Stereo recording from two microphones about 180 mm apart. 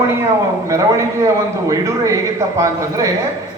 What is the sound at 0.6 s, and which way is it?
A man's voice, 15° right (ahead or behind).